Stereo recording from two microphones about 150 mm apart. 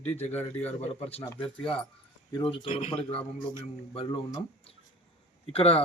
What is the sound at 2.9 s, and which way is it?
Speech, 35° left (ahead or behind).